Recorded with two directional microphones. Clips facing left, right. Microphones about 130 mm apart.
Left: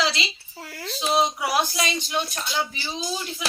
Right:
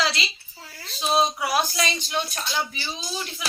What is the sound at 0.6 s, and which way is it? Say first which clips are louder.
Speech: left 3 dB; 75° left (ahead or behind).